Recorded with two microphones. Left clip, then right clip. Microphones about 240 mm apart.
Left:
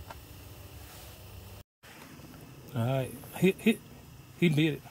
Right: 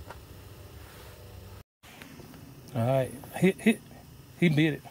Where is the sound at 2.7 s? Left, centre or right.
Centre.